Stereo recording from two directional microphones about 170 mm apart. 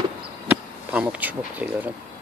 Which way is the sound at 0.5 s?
10° right (ahead or behind).